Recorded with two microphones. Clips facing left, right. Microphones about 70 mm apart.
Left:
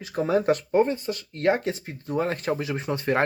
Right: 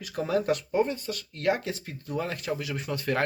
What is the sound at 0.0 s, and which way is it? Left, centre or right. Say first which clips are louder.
Speech: left 4 dB; left.